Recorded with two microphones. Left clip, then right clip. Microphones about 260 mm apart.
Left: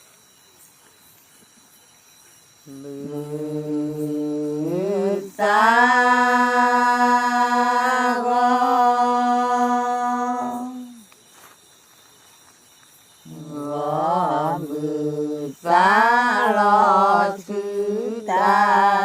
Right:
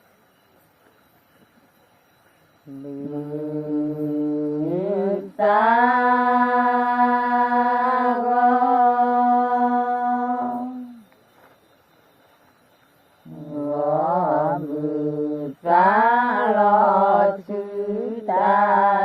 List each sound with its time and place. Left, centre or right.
3.1 s music: left
13.5 s mantra: left